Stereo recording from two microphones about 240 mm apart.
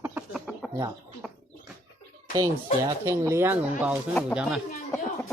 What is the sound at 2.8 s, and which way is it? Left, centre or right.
Speech, centre.